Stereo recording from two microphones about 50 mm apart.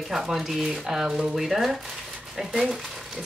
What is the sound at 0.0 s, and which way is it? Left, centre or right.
Speech, centre.